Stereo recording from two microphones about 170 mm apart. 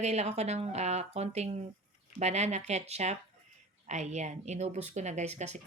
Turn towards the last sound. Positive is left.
turn(degrees=-40)  # may be behind; listen again after turning